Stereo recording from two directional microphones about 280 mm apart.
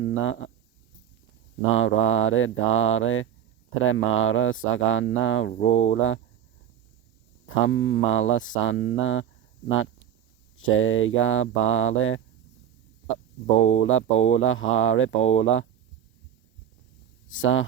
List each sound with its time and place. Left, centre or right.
0.0 s speech: left
1.7 s speech: left
7.4 s speech: left
13.8 s speech: left
17.2 s speech: left